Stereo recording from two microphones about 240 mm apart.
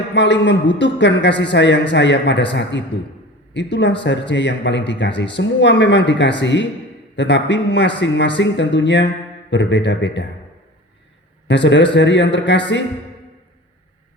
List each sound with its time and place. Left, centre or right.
0.1 s a man's voice: left
11.4 s a man's voice: left